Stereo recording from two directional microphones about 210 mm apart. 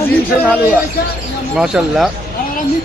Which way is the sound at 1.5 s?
5° right (ahead or behind).